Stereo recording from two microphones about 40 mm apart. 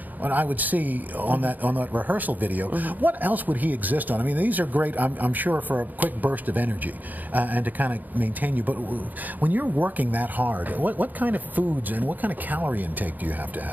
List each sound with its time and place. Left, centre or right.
0.2 s speech: right